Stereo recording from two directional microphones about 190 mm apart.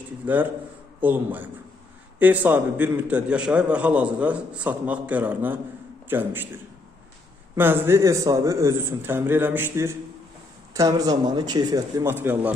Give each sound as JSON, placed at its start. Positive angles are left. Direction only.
{"t": 0.2, "sound": "a man's voice", "side_deg": -10}
{"t": 7.5, "sound": "a man's voice", "side_deg": -10}